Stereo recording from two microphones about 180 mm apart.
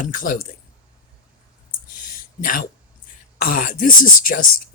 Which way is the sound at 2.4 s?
50° left (ahead or behind).